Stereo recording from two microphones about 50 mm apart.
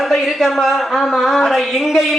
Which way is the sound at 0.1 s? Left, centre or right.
Centre.